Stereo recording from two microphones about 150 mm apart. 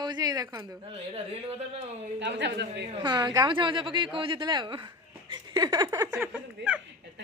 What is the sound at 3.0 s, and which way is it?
A woman's voice, 30° right (ahead or behind).